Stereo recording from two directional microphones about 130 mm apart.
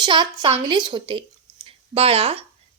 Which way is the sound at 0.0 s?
40° right (ahead or behind).